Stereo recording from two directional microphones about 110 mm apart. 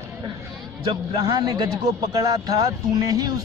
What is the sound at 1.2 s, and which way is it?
Speech, 40° right (ahead or behind).